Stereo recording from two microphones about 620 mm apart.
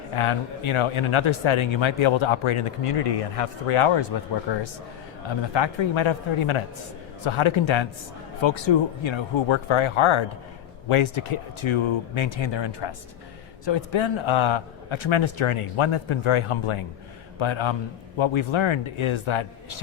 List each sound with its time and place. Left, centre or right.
0.2 s a man's voice: left